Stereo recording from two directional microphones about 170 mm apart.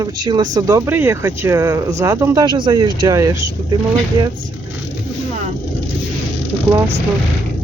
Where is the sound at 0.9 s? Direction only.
15° right (ahead or behind).